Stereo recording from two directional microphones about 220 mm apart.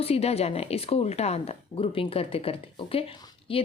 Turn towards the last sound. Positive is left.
turn(degrees=25)  # may be behind; listen again after turning